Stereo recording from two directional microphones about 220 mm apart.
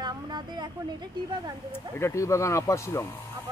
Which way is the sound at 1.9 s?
15° left (ahead or behind).